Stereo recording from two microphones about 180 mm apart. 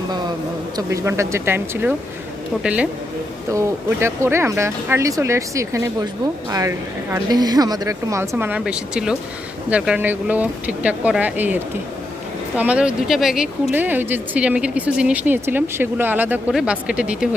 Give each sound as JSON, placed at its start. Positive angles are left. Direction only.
{"t": 0.8, "sound": "speech", "side_deg": -15}